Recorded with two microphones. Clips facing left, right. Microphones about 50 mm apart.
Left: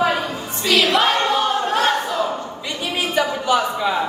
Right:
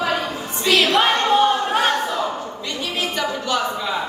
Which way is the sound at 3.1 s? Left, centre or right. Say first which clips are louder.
Left 6 dB; centre.